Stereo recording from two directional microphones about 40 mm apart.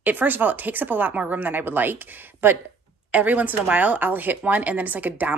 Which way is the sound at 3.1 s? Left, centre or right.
Right.